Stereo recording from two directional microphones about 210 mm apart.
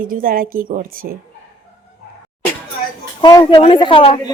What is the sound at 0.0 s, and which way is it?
A woman's voice, 40° right (ahead or behind).